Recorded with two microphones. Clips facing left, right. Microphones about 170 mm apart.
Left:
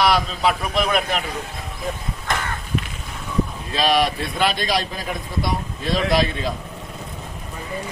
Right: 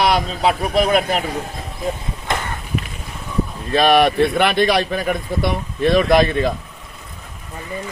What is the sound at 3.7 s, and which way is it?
A man's voice, 55° right (ahead or behind).